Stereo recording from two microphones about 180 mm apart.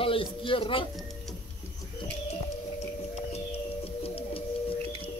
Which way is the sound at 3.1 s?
35° left (ahead or behind).